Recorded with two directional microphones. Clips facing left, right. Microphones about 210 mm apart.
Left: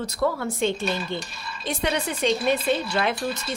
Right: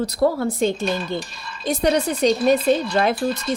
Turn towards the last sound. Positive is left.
turn(degrees=-40)  # may be behind; listen again after turning